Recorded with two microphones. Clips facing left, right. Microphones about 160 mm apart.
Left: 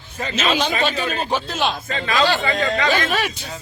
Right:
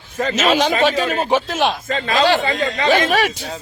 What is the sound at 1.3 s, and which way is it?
Speech, 90° right.